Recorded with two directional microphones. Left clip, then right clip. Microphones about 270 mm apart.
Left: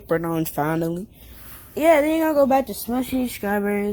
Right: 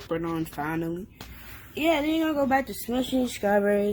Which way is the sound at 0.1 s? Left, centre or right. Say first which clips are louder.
Left 7 dB; left.